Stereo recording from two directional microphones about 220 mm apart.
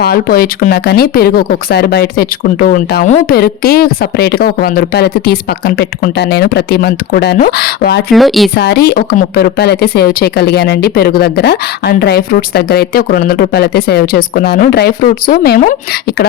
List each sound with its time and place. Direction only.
0.0 s speech: 45° left (ahead or behind)
8.1 s speech: centre (ahead or behind)
8.5 s speech: 45° left (ahead or behind)